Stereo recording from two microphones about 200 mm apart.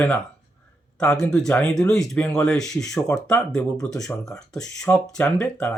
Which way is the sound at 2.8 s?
15° left (ahead or behind).